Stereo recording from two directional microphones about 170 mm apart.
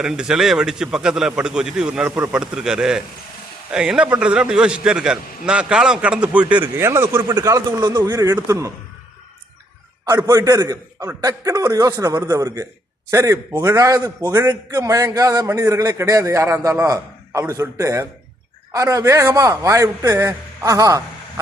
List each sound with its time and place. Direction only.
0.0 s a man's voice: 5° right (ahead or behind)
10.1 s a man's voice: 20° right (ahead or behind)